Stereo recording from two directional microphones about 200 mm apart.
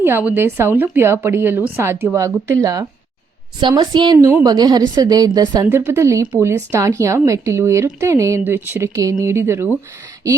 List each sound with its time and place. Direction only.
0.0 s a woman's voice: 10° right (ahead or behind)